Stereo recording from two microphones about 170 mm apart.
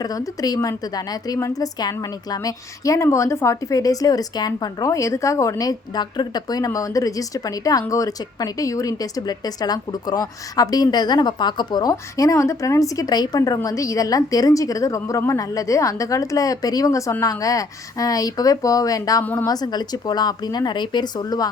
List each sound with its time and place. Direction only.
0.0 s a woman's voice: 20° left (ahead or behind)
19.5 s a woman's voice: 25° left (ahead or behind)